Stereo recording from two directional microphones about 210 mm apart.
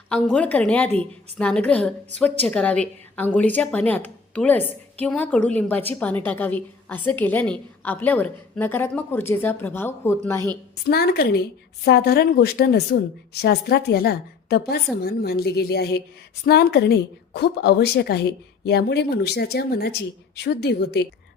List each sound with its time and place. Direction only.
0.1 s a woman's voice: 5° left (ahead or behind)
10.8 s a woman's voice: 50° left (ahead or behind)